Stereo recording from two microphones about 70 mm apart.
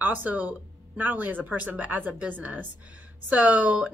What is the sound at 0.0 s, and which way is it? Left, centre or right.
A woman's voice, right.